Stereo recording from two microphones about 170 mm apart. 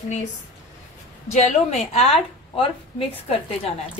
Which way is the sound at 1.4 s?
40° left (ahead or behind).